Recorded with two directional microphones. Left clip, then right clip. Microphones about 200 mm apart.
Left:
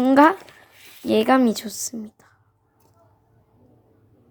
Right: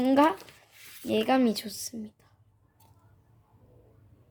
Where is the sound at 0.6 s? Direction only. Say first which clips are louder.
Left 8 dB; 15° left (ahead or behind).